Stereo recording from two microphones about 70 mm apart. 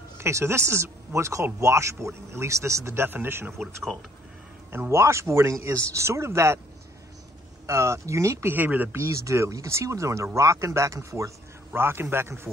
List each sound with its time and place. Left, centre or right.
0.2 s speech: right
4.7 s speech: right
7.6 s speech: right
8.5 s speech: right
8.9 s speech: right
11.7 s speech: right